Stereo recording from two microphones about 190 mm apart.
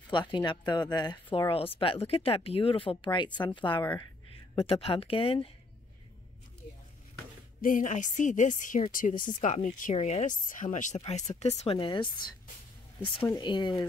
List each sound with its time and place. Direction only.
0.1 s speech: 25° left (ahead or behind)
7.6 s a woman's voice: 45° left (ahead or behind); by 12.3 s 25° left (ahead or behind)
13.3 s speech: 25° left (ahead or behind)